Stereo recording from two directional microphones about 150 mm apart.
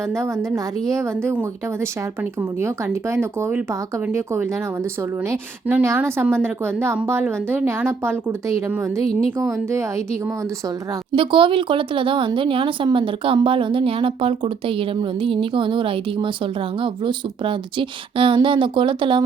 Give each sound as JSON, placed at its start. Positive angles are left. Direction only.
{"t": 0.2, "sound": "a woman's voice", "side_deg": -20}
{"t": 11.1, "sound": "a woman's voice", "side_deg": -35}